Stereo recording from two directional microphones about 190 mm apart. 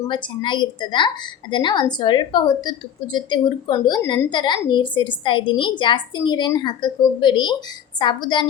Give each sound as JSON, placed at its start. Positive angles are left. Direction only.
{"t": 0.1, "sound": "a woman's voice", "side_deg": 25}